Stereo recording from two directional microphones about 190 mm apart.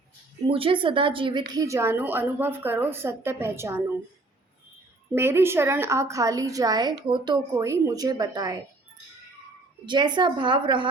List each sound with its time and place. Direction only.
0.5 s a woman's voice: 25° right (ahead or behind)
5.1 s a woman's voice: 15° right (ahead or behind)
9.8 s a woman's voice: 25° right (ahead or behind)